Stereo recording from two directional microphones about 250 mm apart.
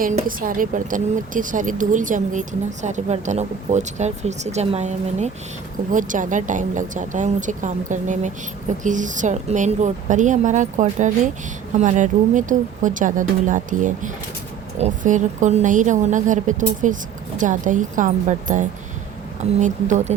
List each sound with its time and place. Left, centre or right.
0.0 s a woman's voice: right